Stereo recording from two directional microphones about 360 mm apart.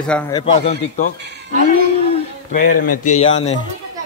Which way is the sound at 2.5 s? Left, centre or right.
Left.